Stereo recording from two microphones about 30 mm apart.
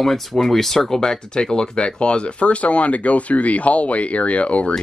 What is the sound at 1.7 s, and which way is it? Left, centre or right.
Speech, left.